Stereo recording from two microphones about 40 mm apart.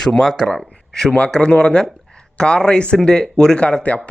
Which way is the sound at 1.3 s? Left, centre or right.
Left.